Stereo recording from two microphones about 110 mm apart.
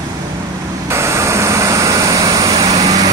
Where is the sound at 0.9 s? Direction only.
25° right (ahead or behind).